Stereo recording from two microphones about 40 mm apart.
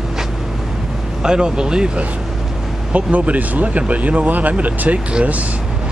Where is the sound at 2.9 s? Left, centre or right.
Right.